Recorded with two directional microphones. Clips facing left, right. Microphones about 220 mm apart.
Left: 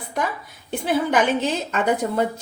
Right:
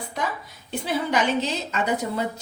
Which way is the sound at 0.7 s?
50° left (ahead or behind).